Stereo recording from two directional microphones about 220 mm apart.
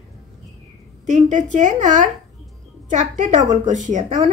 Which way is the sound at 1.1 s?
35° right (ahead or behind).